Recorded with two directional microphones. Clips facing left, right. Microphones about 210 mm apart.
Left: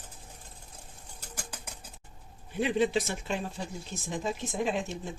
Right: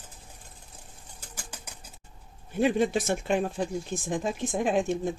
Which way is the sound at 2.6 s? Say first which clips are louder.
Right 3 dB; 50° right (ahead or behind).